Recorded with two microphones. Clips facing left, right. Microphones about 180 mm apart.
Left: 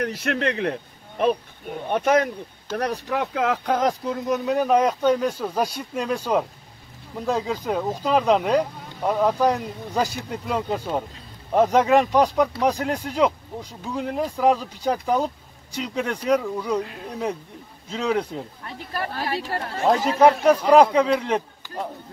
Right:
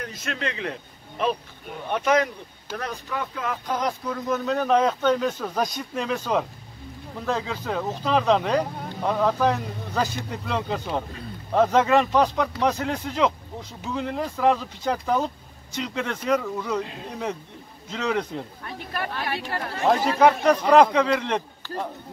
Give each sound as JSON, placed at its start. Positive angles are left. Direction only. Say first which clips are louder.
{"t": 0.0, "sound": "speech", "louder": "left 7 dB", "side_deg": 65}
{"t": 2.7, "sound": "speech", "louder": "left 6 dB", "side_deg": 65}
{"t": 4.3, "sound": "speech", "louder": "left 2 dB", "side_deg": 10}
{"t": 17.8, "sound": "speech", "louder": "left 2 dB", "side_deg": 10}
{"t": 18.7, "sound": "speech", "louder": "left 1 dB", "side_deg": 35}
{"t": 19.9, "sound": "speech", "louder": "left 2 dB", "side_deg": 10}